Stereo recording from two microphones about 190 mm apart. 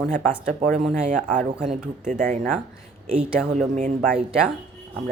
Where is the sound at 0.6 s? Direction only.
35° right (ahead or behind).